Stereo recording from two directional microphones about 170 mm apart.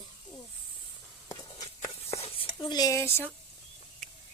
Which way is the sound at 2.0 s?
35° left (ahead or behind).